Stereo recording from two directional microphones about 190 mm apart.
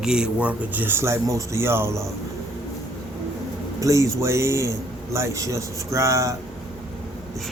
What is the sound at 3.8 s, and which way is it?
A man's voice, 15° right (ahead or behind).